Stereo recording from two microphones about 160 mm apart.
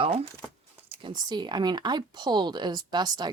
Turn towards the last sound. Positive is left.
turn(degrees=-25)  # may be behind; listen again after turning